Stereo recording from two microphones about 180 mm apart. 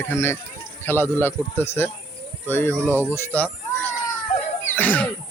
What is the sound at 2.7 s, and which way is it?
Speech, 10° right (ahead or behind).